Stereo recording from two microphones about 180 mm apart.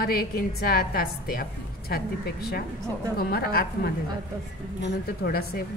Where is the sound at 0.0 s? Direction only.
55° left (ahead or behind).